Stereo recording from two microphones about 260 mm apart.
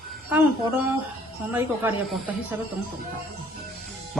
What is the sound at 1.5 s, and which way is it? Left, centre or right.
A man's voice, centre.